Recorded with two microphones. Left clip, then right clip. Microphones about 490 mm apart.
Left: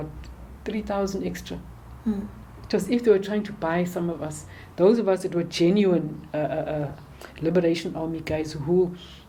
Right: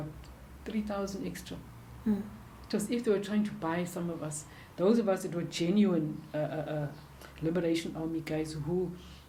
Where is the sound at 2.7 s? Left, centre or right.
Left.